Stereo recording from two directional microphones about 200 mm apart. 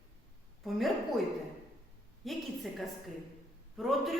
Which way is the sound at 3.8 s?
Centre (ahead or behind).